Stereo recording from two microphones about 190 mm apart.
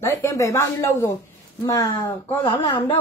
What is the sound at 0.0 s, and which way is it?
Speech, 15° left (ahead or behind).